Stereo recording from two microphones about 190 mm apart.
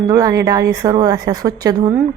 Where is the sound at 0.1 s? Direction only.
15° right (ahead or behind).